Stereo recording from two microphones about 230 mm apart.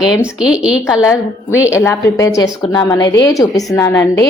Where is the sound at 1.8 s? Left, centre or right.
Centre.